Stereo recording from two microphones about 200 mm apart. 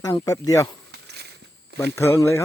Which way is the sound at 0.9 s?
55° right (ahead or behind).